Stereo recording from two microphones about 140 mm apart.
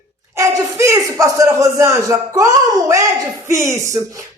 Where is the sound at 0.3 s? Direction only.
20° right (ahead or behind).